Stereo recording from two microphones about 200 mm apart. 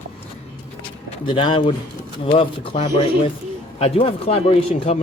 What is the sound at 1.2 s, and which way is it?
Speech, 25° left (ahead or behind).